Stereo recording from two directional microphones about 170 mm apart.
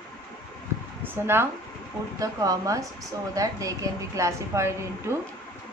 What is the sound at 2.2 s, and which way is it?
A woman's voice, 20° right (ahead or behind).